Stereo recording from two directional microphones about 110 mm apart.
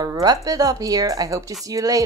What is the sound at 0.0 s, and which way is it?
Speech, 35° right (ahead or behind).